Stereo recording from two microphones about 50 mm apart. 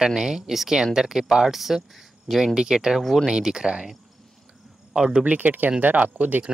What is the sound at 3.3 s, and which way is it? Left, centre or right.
Speech, centre.